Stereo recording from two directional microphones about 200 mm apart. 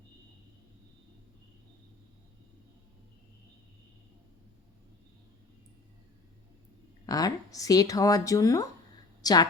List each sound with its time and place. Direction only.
7.0 s a woman's voice: 20° left (ahead or behind)